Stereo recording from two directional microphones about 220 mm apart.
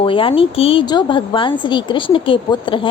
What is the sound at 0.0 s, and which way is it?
A woman's voice, 25° left (ahead or behind).